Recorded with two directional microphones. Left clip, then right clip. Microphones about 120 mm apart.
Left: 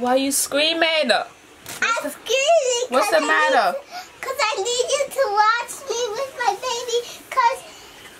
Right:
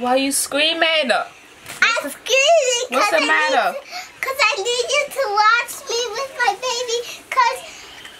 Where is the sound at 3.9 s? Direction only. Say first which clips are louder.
Right 4 dB; 15° right (ahead or behind).